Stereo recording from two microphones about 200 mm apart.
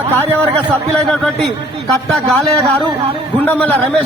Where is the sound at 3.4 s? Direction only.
10° left (ahead or behind).